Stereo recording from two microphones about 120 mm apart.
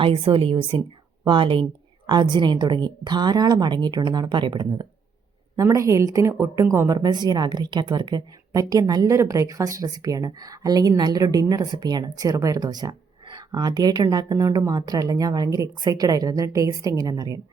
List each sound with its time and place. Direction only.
0.0 s a woman's voice: 50° right (ahead or behind); by 17.4 s 30° right (ahead or behind)